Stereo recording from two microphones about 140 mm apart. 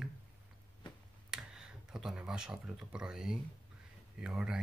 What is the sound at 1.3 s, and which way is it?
Speech, 5° right (ahead or behind).